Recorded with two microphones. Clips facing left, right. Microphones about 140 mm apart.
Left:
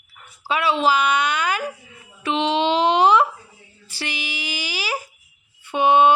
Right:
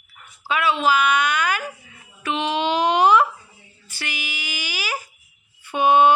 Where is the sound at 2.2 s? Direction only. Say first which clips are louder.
Left 3 dB; 25° left (ahead or behind).